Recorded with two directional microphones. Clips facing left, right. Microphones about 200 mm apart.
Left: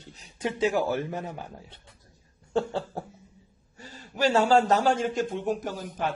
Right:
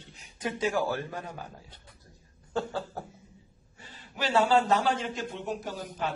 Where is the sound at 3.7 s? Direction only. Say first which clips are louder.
Left 6 dB; 40° left (ahead or behind).